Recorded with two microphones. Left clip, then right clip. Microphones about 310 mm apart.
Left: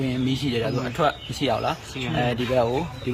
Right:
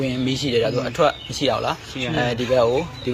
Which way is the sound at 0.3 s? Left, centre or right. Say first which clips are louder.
Right 8 dB; centre.